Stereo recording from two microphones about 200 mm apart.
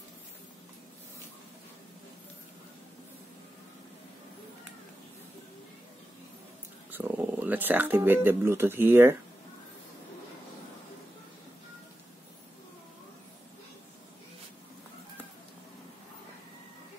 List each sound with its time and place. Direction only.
6.9 s speech: 10° right (ahead or behind)